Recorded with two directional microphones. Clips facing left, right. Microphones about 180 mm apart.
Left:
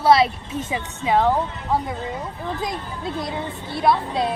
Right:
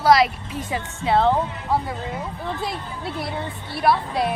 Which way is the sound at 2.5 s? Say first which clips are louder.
Left 1 dB; 20° left (ahead or behind).